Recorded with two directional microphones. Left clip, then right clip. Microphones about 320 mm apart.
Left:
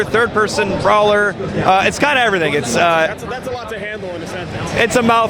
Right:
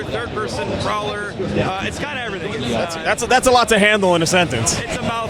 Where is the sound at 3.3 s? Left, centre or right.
Right.